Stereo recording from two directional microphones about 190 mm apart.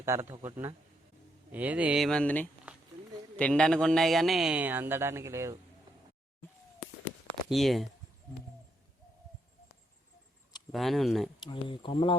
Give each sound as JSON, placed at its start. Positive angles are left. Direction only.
{"t": 0.0, "sound": "a man's voice", "side_deg": -15}
{"t": 7.5, "sound": "speech", "side_deg": 0}
{"t": 10.7, "sound": "speech", "side_deg": 0}
{"t": 11.3, "sound": "speech", "side_deg": 25}